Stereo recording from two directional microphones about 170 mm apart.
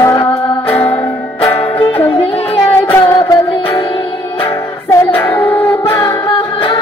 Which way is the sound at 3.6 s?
30° left (ahead or behind).